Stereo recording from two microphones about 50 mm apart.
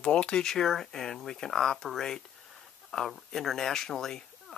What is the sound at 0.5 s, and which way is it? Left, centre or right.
Speech, centre.